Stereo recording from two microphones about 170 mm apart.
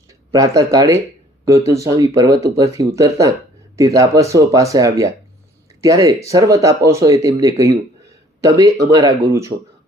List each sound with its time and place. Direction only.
0.1 s speech: 20° right (ahead or behind)